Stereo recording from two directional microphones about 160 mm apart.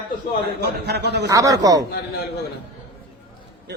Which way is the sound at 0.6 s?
90° right.